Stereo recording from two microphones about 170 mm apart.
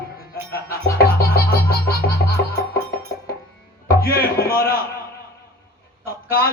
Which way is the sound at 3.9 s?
65° left (ahead or behind).